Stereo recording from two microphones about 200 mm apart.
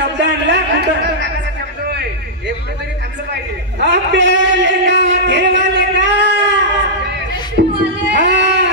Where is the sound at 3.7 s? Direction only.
60° right (ahead or behind).